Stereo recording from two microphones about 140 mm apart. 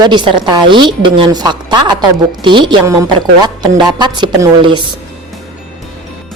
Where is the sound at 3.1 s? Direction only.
30° right (ahead or behind).